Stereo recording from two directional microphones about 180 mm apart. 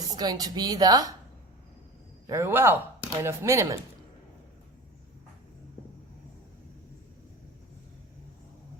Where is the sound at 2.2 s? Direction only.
15° right (ahead or behind).